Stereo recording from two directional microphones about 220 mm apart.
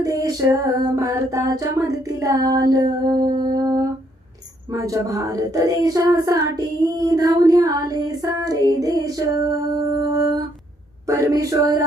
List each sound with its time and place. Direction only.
0.0 s music: 15° right (ahead or behind)
10.0 s a sound: 15° right (ahead or behind)
11.0 s music: 15° right (ahead or behind)